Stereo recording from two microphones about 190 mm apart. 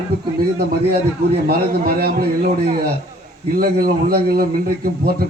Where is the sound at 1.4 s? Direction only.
50° right (ahead or behind).